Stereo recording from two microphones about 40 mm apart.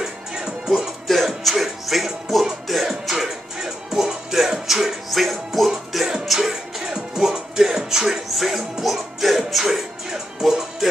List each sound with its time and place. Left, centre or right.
0.0 s music: centre
1.0 s music: centre